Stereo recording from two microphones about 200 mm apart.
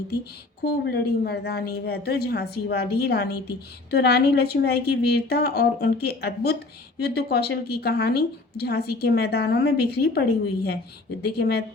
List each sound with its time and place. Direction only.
0.6 s a woman's voice: 55° left (ahead or behind)